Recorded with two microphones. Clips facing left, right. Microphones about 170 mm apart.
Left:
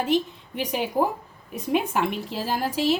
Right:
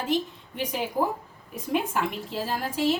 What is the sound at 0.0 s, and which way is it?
A woman's voice, 70° left (ahead or behind).